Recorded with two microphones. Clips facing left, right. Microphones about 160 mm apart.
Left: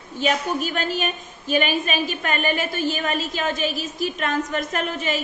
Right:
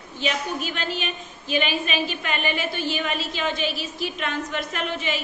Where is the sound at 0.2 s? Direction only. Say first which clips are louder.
Left 4 dB; 45° left (ahead or behind).